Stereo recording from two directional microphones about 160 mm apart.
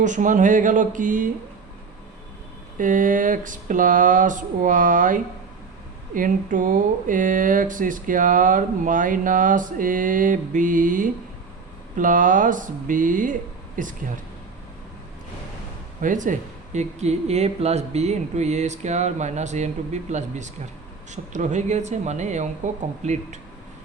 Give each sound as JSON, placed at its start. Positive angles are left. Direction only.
{"t": 0.0, "sound": "speech", "side_deg": -50}
{"t": 2.7, "sound": "speech", "side_deg": -55}
{"t": 16.0, "sound": "speech", "side_deg": -55}